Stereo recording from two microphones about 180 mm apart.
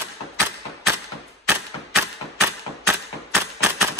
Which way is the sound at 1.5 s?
15° right (ahead or behind).